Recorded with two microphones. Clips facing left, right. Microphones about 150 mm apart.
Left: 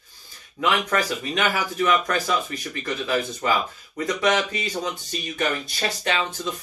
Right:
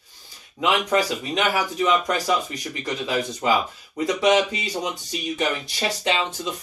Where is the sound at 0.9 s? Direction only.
15° right (ahead or behind).